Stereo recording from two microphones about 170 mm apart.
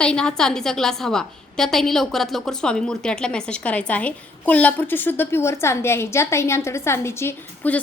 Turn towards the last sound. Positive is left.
turn(degrees=10)  # may be behind; listen again after turning